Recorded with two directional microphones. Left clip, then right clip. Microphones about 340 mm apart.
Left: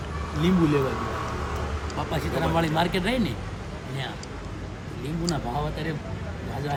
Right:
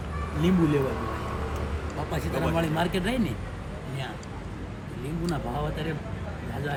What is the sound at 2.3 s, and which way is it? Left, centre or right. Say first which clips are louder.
Speech: left 2 dB; centre.